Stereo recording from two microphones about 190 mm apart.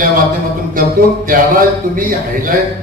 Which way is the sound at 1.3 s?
50° right (ahead or behind).